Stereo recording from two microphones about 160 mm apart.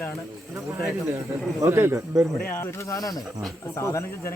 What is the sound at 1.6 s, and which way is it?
Speech, 15° right (ahead or behind).